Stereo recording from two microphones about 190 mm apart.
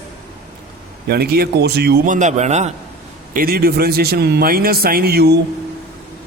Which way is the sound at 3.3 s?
50° right (ahead or behind).